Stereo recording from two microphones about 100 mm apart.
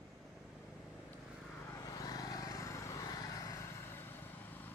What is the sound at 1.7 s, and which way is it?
Vehicle, 35° left (ahead or behind).